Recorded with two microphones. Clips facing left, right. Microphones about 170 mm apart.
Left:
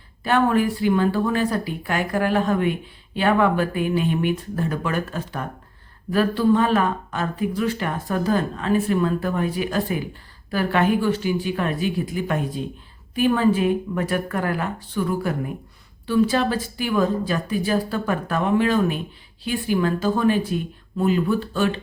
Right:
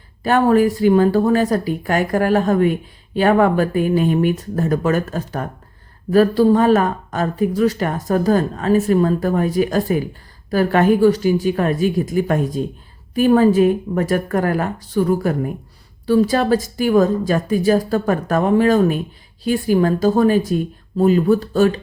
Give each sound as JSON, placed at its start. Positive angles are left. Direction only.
{"t": 0.2, "sound": "a woman's voice", "side_deg": -40}